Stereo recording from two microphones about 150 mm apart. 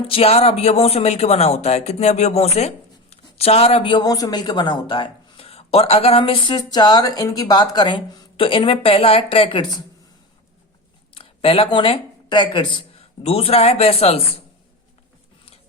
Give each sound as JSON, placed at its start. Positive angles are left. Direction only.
{"t": 0.1, "sound": "speech", "side_deg": 40}
{"t": 11.1, "sound": "speech", "side_deg": 35}